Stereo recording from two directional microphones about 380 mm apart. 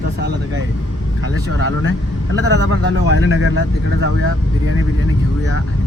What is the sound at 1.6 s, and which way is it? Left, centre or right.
Speech, right.